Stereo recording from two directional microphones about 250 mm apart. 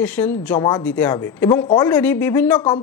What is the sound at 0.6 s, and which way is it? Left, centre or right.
Speech, centre.